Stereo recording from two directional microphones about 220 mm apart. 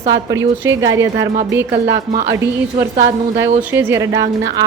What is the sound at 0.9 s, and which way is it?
Speech, 55° right (ahead or behind).